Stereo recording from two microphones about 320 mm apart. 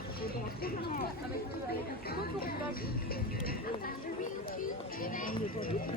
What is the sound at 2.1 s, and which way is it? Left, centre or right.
Speech, left.